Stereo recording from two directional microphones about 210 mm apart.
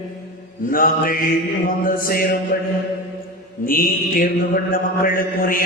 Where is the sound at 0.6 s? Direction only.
40° left (ahead or behind).